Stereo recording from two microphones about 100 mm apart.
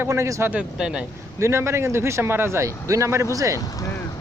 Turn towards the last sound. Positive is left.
turn(degrees=30)  # may be behind; listen again after turning